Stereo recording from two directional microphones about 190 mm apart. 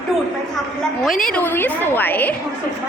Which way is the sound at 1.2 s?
5° left (ahead or behind).